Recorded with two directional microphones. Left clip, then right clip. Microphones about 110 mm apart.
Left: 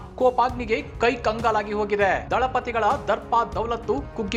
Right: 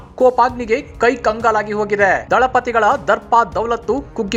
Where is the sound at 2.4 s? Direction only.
55° right (ahead or behind).